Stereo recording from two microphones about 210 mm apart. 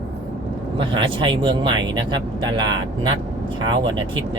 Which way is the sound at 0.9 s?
25° right (ahead or behind).